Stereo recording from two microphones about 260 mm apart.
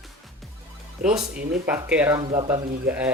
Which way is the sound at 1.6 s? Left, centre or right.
Centre.